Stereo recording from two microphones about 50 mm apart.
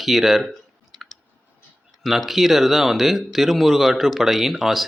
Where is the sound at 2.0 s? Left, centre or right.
Centre.